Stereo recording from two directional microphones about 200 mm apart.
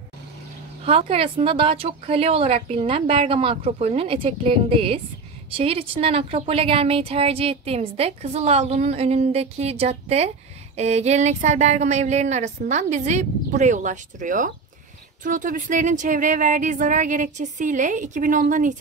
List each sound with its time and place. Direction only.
0.8 s a woman's voice: 30° right (ahead or behind)